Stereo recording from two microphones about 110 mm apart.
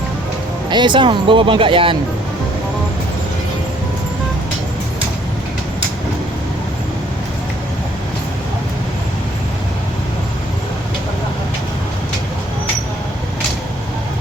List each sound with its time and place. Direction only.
0.7 s speech: 45° right (ahead or behind)